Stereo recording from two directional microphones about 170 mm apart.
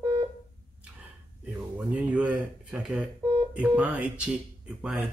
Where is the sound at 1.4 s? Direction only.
5° right (ahead or behind).